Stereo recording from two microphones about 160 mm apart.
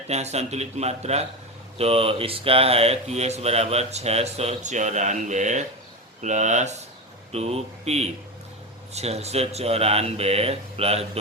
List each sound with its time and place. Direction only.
0.1 s speech: 45° right (ahead or behind)